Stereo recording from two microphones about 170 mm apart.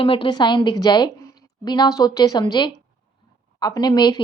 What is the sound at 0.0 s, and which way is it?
A woman's voice, 30° left (ahead or behind).